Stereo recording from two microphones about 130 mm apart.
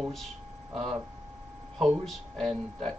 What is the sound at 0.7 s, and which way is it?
Speech, 50° right (ahead or behind).